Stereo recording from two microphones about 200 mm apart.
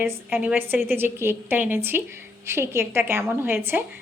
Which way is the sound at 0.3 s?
5° right (ahead or behind).